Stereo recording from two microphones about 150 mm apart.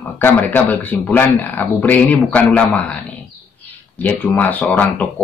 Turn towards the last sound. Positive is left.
turn(degrees=10)  # may be behind; listen again after turning